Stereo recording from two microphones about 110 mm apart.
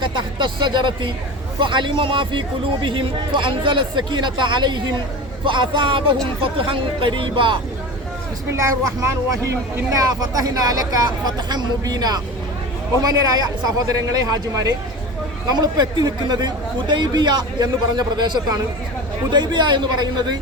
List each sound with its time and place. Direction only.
0.0 s speech: 45° right (ahead or behind)
8.5 s speech: 30° right (ahead or behind)